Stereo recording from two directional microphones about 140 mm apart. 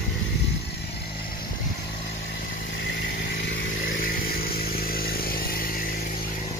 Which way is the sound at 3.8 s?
90° left.